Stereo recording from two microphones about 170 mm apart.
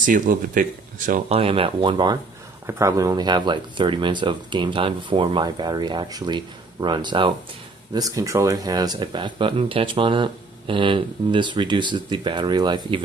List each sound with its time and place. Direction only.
0.0 s speech: 50° right (ahead or behind)
1.3 s speech: 35° right (ahead or behind)